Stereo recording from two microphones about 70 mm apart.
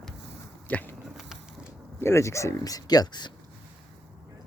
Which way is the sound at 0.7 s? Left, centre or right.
Left.